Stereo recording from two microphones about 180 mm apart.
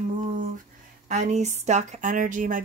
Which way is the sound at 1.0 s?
40° right (ahead or behind).